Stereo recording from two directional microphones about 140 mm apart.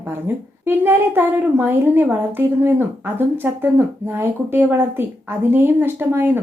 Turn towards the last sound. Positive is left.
turn(degrees=-15)  # may be behind; listen again after turning